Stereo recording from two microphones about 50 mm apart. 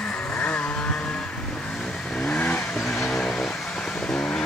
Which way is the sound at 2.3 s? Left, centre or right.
Left.